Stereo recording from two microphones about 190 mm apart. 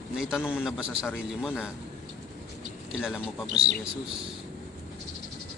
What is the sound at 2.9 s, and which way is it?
Speech, 5° right (ahead or behind).